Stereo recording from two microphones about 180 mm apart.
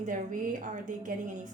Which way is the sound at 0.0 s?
45° right (ahead or behind).